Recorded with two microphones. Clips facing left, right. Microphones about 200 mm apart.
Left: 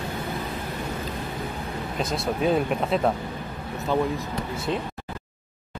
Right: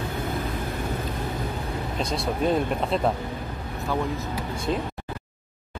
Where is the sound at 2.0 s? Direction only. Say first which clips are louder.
Left 1 dB; centre (ahead or behind).